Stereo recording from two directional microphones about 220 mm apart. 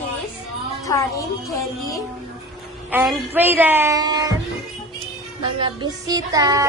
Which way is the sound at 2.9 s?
5° right (ahead or behind).